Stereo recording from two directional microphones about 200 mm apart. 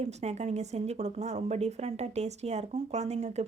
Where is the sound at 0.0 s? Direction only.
35° right (ahead or behind).